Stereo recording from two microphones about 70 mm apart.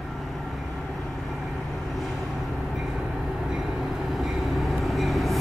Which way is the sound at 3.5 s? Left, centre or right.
Centre.